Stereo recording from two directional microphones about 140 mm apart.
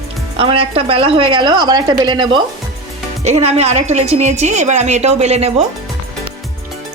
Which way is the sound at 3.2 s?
50° right (ahead or behind).